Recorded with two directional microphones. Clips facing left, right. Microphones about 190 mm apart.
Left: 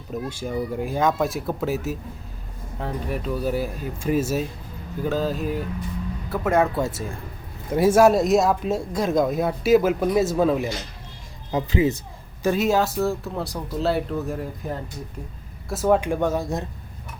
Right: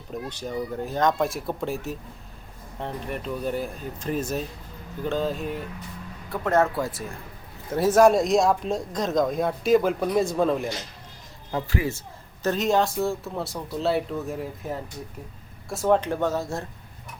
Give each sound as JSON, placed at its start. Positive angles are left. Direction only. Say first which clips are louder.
{"t": 0.1, "sound": "a man's voice", "louder": "left 3 dB", "side_deg": 10}
{"t": 6.7, "sound": "speech", "louder": "left 3 dB", "side_deg": 25}
{"t": 7.7, "sound": "a man's voice", "louder": "left 2 dB", "side_deg": 10}
{"t": 11.5, "sound": "a man's voice", "louder": "left 6 dB", "side_deg": 20}